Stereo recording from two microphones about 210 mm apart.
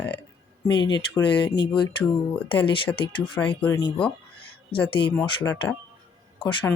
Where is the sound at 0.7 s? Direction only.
20° left (ahead or behind).